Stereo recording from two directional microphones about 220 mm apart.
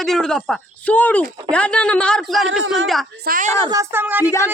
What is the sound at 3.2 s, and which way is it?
Speech, 40° right (ahead or behind).